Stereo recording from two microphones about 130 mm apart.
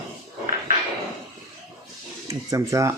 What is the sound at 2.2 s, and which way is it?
Speech, 25° right (ahead or behind).